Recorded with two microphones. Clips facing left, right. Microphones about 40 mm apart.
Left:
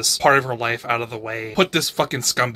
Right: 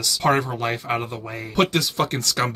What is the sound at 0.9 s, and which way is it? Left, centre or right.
Speech, left.